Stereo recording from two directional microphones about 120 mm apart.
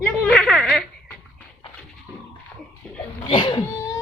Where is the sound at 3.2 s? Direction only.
40° left (ahead or behind).